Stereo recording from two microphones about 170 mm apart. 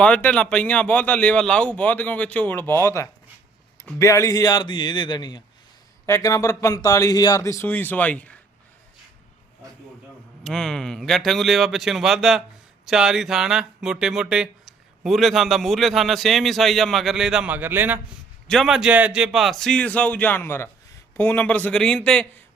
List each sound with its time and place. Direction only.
0.0 s a man's voice: 10° left (ahead or behind)
10.4 s a man's voice: 5° left (ahead or behind)
18.4 s a man's voice: centre (ahead or behind)